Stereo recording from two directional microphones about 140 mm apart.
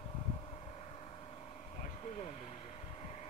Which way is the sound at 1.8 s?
50° left (ahead or behind).